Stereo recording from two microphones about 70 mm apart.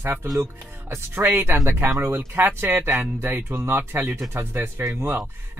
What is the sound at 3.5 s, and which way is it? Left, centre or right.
Speech, right.